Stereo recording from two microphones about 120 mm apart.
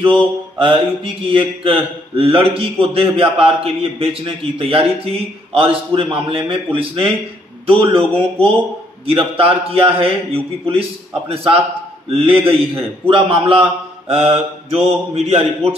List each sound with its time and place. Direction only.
0.0 s mantra: 45° right (ahead or behind)
1.2 s a man's voice: 45° right (ahead or behind)